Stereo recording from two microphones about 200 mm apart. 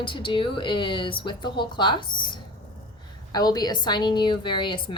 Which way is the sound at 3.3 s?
20° left (ahead or behind).